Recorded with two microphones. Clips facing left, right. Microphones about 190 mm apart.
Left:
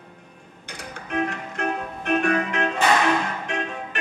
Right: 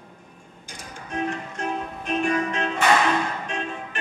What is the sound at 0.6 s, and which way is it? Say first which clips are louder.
Music: left 3 dB; 65° left (ahead or behind).